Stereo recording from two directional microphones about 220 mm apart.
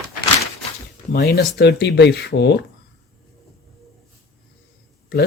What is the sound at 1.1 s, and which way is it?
Speech, 45° left (ahead or behind).